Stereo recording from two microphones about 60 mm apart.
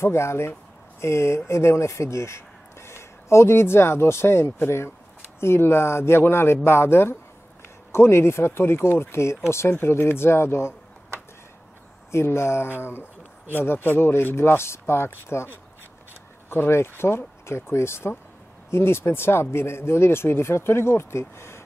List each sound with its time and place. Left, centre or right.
0.0 s speech: left
12.1 s speech: left